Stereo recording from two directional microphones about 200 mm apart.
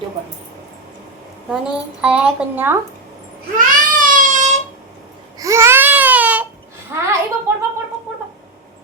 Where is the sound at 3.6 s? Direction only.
40° right (ahead or behind).